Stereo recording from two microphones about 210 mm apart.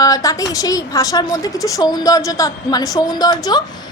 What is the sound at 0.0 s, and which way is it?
A woman's voice, 15° left (ahead or behind).